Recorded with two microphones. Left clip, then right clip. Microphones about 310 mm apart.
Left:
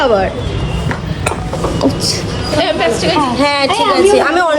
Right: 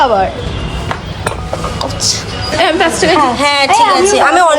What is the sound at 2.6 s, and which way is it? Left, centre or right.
Speech, right.